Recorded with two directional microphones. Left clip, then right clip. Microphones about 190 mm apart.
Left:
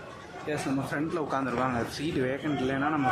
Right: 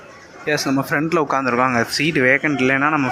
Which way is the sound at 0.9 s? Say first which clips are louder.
Right 13 dB; 20° right (ahead or behind).